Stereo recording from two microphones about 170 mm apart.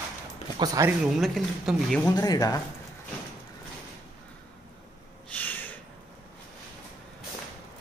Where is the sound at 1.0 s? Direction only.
Centre (ahead or behind).